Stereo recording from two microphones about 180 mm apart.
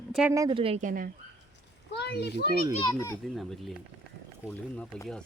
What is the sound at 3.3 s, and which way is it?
Speech, centre (ahead or behind).